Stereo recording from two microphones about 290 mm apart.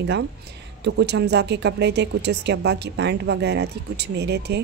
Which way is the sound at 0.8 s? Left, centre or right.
Right.